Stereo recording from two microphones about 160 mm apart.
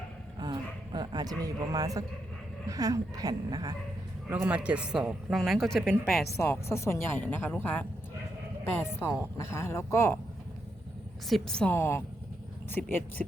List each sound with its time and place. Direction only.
0.3 s speech: 25° right (ahead or behind)
4.3 s speech: 10° right (ahead or behind)
6.4 s speech: 15° left (ahead or behind)
11.3 s speech: centre (ahead or behind)